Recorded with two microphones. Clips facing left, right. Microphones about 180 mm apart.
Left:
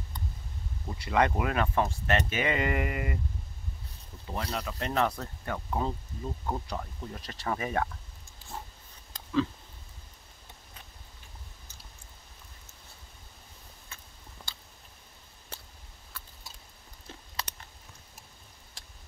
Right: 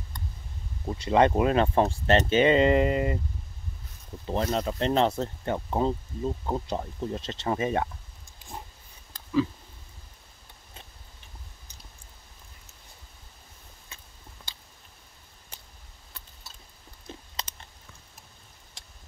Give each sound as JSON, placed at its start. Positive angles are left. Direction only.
{"t": 0.8, "sound": "speech", "side_deg": -25}
{"t": 4.3, "sound": "speech", "side_deg": -30}
{"t": 8.4, "sound": "pig", "side_deg": -20}
{"t": 13.9, "sound": "a sound", "side_deg": -15}
{"t": 16.1, "sound": "a sound", "side_deg": -20}
{"t": 17.4, "sound": "chewing", "side_deg": -20}